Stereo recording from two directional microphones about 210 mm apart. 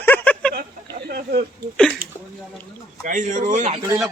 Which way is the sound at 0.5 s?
45° right (ahead or behind).